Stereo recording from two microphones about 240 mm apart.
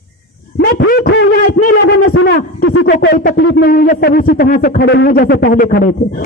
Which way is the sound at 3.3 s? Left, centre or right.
Left.